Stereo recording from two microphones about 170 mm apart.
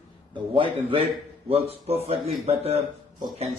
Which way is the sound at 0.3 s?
30° right (ahead or behind).